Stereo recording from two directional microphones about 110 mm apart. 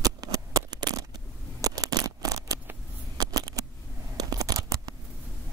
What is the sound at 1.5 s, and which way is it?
Scissors, 35° right (ahead or behind).